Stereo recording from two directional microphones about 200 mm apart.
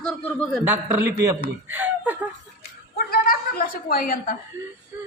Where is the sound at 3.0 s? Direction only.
45° left (ahead or behind).